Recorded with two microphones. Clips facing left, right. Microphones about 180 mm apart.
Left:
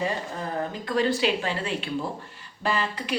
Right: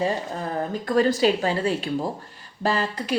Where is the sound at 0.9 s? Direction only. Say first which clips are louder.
Right 5 dB; 45° right (ahead or behind).